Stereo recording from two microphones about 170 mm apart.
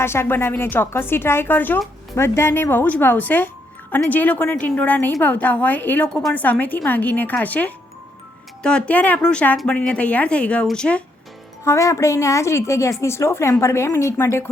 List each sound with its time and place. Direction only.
0.0 s a woman's voice: 15° left (ahead or behind)
11.6 s a woman's voice: 15° left (ahead or behind)